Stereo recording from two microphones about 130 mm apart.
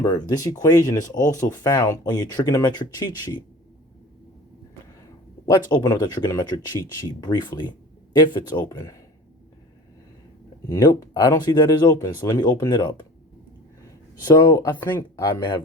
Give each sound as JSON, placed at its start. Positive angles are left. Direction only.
{"t": 0.0, "sound": "speech", "side_deg": 30}
{"t": 5.5, "sound": "speech", "side_deg": 30}
{"t": 10.7, "sound": "speech", "side_deg": 30}
{"t": 14.3, "sound": "speech", "side_deg": 30}